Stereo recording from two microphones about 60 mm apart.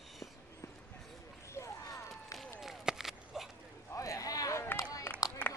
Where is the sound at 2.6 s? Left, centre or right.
Centre.